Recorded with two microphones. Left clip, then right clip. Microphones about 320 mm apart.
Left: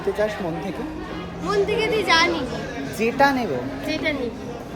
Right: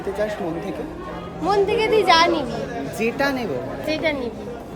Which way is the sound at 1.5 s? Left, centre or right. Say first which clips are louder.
Right 3 dB; centre.